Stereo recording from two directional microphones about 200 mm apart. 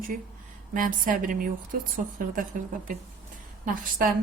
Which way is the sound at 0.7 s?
45° right (ahead or behind).